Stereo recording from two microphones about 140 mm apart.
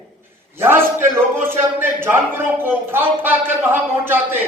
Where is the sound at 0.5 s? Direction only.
15° right (ahead or behind).